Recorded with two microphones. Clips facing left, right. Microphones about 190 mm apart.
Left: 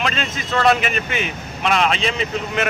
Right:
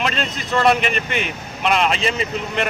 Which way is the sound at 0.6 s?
Centre (ahead or behind).